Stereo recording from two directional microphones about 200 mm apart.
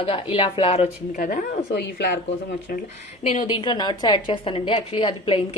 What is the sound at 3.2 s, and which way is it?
A woman's voice, 30° left (ahead or behind).